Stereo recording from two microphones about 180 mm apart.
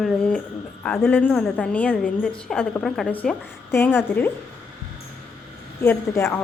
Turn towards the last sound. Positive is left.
turn(degrees=15)  # may be behind; listen again after turning